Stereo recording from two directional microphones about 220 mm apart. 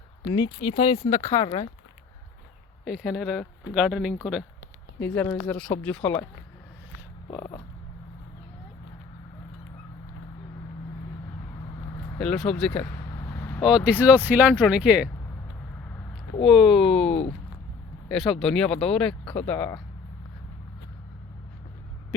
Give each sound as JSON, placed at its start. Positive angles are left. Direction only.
{"t": 0.3, "sound": "speech", "side_deg": 20}
{"t": 1.1, "sound": "speech", "side_deg": 15}
{"t": 2.8, "sound": "speech", "side_deg": 0}
{"t": 7.3, "sound": "frog", "side_deg": 20}
{"t": 12.1, "sound": "speech", "side_deg": 5}
{"t": 13.1, "sound": "vehicle", "side_deg": 15}
{"t": 13.7, "sound": "speech", "side_deg": -5}
{"t": 16.4, "sound": "speech", "side_deg": 0}